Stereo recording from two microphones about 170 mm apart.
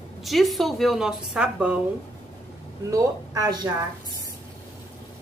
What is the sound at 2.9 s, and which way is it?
Speech, 20° right (ahead or behind).